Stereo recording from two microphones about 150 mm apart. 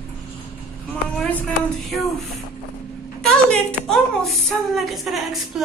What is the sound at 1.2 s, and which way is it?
Speech, 10° left (ahead or behind).